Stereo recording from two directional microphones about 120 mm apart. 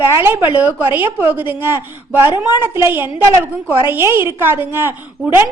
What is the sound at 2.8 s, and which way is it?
A woman's voice, 20° right (ahead or behind).